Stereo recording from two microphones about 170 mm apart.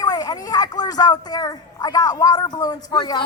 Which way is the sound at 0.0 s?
20° left (ahead or behind).